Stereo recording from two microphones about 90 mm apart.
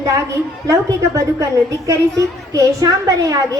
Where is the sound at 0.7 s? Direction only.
35° right (ahead or behind).